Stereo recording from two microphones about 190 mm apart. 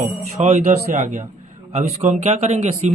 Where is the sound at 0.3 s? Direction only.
35° right (ahead or behind).